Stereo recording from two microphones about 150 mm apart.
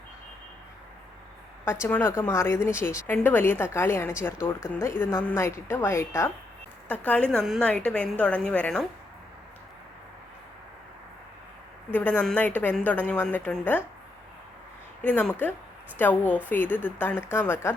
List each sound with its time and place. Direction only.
1.6 s speech: 15° left (ahead or behind)
11.9 s speech: 10° left (ahead or behind)
15.0 s speech: 10° left (ahead or behind)